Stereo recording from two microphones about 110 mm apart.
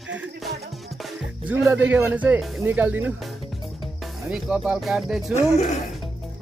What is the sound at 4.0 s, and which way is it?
Speech, 5° right (ahead or behind).